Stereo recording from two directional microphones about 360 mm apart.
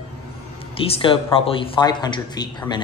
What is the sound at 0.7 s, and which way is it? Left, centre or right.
Speech, centre.